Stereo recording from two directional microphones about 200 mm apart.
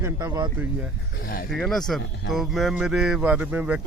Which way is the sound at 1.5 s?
Centre (ahead or behind).